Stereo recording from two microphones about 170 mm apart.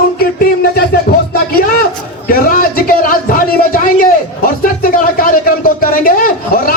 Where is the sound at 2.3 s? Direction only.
55° left (ahead or behind).